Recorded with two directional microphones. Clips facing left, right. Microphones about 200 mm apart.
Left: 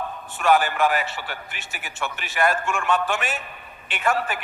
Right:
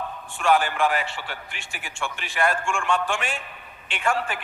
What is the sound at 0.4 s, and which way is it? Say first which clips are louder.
Speech: left 2 dB; 45° left (ahead or behind).